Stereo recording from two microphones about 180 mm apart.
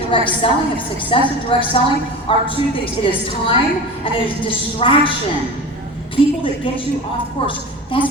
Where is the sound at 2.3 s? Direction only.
30° left (ahead or behind).